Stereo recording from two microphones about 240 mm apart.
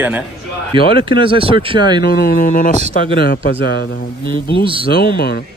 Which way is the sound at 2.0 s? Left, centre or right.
Left.